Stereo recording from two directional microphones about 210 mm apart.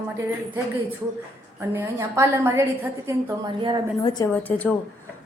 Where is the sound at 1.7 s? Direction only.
15° right (ahead or behind).